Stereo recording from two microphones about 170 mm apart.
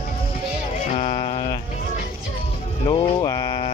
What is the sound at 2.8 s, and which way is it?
Speech, 30° left (ahead or behind).